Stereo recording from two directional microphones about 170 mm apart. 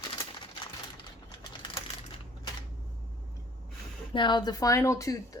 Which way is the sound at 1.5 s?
30° left (ahead or behind).